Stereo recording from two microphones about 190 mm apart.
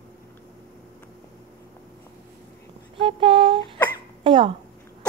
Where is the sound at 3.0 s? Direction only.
30° right (ahead or behind).